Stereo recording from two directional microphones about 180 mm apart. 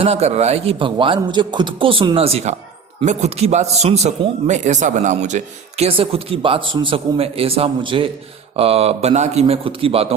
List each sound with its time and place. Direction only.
0.0 s a man's voice: 35° right (ahead or behind)